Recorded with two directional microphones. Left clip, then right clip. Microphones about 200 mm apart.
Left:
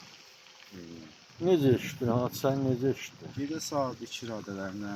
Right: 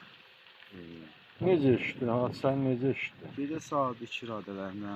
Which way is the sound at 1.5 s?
35° right (ahead or behind).